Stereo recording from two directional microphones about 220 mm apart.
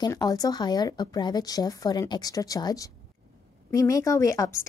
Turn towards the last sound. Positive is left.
turn(degrees=15)  # may be behind; listen again after turning